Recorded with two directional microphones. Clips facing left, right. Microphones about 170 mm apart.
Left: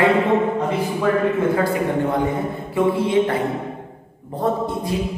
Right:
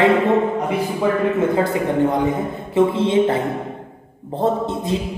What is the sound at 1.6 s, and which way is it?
A man's voice, 20° right (ahead or behind).